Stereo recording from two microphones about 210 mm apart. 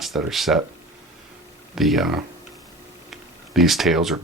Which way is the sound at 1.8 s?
Centre (ahead or behind).